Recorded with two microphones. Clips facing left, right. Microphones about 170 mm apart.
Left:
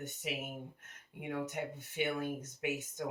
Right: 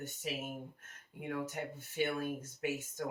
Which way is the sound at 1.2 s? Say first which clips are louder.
Left 1 dB; 15° left (ahead or behind).